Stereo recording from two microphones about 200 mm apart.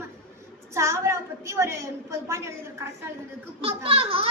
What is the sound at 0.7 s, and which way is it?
A woman's voice, 15° right (ahead or behind).